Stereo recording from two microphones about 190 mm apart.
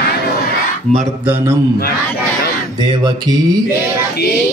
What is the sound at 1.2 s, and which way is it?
Mantra, 15° right (ahead or behind).